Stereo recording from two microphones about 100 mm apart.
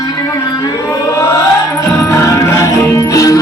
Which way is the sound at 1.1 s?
30° left (ahead or behind).